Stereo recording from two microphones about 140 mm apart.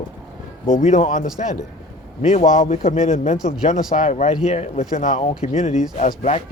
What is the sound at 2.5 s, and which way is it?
Speech, 70° left (ahead or behind).